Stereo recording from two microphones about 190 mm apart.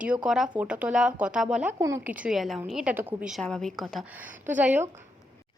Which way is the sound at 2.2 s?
Centre (ahead or behind).